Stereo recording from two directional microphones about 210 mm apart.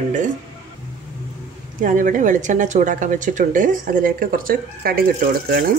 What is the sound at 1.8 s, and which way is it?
Speech, 40° right (ahead or behind).